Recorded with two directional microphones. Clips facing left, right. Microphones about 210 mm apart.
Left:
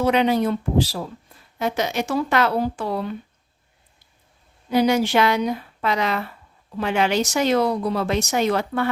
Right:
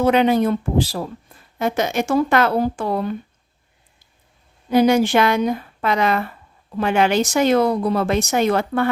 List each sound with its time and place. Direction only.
0.0 s speech: 50° right (ahead or behind)
4.7 s speech: 50° right (ahead or behind)